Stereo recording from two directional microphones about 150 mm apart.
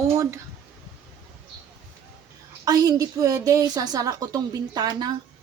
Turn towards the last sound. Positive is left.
turn(degrees=-30)  # may be behind; listen again after turning